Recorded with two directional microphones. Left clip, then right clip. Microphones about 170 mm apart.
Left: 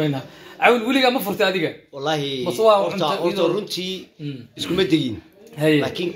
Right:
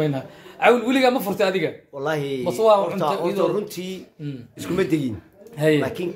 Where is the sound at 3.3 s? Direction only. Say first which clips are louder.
Left 1 dB; 15° right (ahead or behind).